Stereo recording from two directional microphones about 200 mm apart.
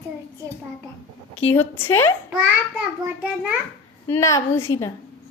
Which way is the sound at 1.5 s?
10° left (ahead or behind).